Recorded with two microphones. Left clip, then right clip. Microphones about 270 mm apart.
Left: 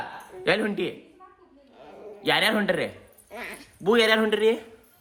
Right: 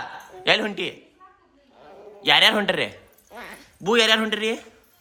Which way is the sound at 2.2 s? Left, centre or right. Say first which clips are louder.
Right 6 dB; centre.